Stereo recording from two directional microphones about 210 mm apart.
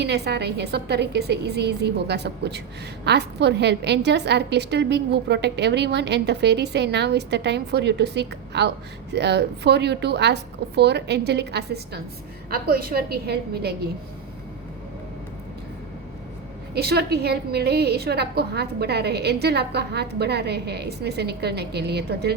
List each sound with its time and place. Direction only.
0.0 s a woman's voice: 50° right (ahead or behind)
16.7 s a woman's voice: 50° right (ahead or behind)